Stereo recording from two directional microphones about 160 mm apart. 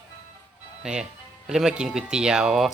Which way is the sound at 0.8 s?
5° right (ahead or behind).